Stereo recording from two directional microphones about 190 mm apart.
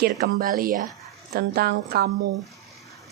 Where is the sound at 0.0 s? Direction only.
50° right (ahead or behind).